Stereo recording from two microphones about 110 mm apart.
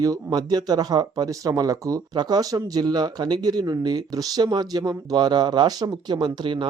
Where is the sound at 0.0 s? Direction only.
35° right (ahead or behind).